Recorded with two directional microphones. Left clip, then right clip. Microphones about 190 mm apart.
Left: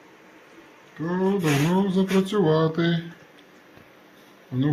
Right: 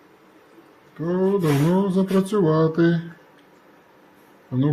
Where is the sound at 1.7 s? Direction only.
50° right (ahead or behind).